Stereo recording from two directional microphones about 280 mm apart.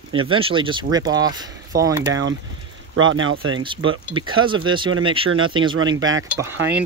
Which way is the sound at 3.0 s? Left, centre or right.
Right.